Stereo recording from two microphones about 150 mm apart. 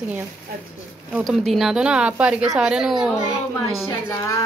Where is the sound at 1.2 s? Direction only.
Centre (ahead or behind).